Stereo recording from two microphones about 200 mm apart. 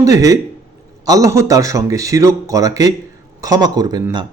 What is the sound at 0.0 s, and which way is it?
A man's voice, 15° right (ahead or behind).